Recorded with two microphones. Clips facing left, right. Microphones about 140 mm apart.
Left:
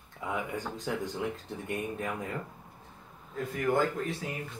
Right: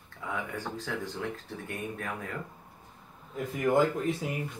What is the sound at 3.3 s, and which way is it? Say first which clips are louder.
Speech: right 2 dB; 20° right (ahead or behind).